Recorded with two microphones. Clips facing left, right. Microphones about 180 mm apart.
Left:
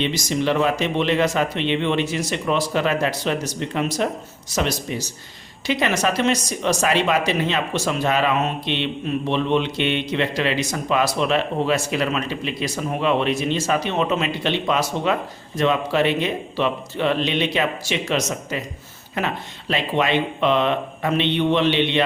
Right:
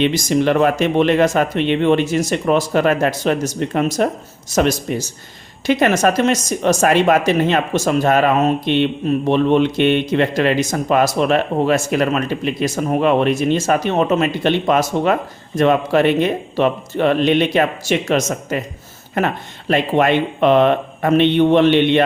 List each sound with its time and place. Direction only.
0.0 s speech: 50° right (ahead or behind)